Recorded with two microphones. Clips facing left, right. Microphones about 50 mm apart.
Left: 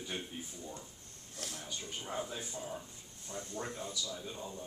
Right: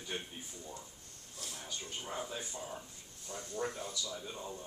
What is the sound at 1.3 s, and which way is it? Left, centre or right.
Speech, left.